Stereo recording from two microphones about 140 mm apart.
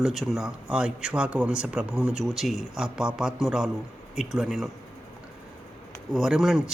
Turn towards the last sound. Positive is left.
turn(degrees=-5)  # may be behind; listen again after turning